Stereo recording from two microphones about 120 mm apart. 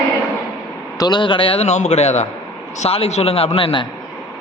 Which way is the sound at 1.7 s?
70° left (ahead or behind).